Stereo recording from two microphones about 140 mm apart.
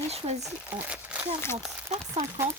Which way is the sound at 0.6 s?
10° right (ahead or behind).